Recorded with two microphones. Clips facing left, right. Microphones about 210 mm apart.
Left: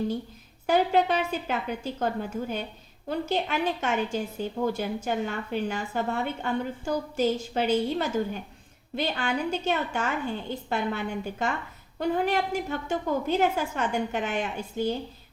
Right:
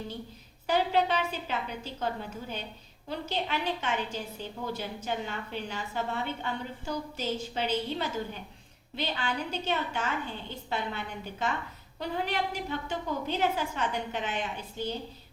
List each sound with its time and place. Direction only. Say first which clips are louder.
0.7 s a woman's voice: left 4 dB; 50° left (ahead or behind)
3.1 s a woman's voice: left 5 dB; 50° left (ahead or behind)